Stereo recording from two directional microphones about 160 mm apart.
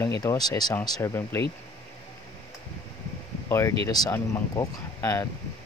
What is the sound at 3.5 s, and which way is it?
Speech, 15° left (ahead or behind).